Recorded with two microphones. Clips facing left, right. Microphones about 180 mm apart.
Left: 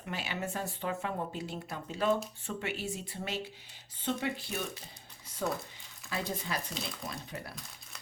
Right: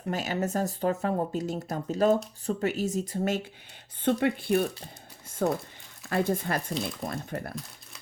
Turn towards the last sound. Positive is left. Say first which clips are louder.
# right 7 dB
turn(degrees=-50)  # may be behind; listen again after turning